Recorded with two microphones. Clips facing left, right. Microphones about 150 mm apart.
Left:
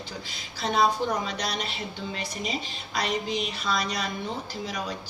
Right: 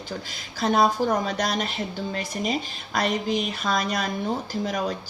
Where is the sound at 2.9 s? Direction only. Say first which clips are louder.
Right 4 dB; 50° right (ahead or behind).